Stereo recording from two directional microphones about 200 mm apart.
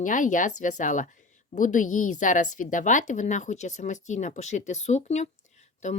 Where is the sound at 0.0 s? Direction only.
40° left (ahead or behind).